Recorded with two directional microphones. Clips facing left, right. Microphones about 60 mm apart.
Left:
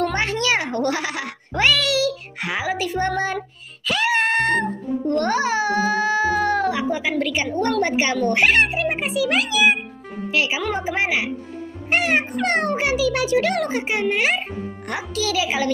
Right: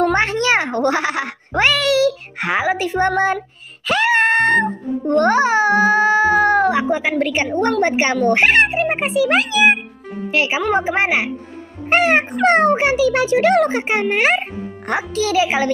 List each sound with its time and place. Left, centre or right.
0.1 s a child's voice: right